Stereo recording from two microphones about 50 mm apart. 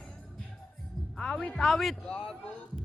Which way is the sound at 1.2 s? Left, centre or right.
Left.